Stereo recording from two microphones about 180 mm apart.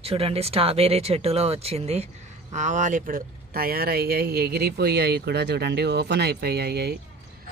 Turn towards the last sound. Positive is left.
turn(degrees=-65)  # may be behind; listen again after turning